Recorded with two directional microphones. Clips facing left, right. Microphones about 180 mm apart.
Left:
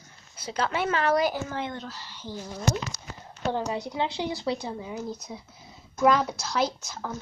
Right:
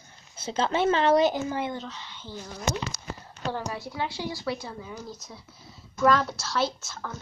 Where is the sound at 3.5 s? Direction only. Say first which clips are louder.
Left 4 dB; 20° left (ahead or behind).